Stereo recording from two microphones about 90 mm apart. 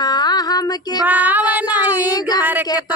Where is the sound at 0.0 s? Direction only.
50° left (ahead or behind).